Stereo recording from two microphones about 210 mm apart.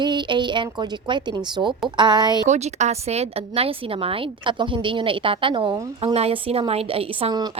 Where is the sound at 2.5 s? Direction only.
35° right (ahead or behind).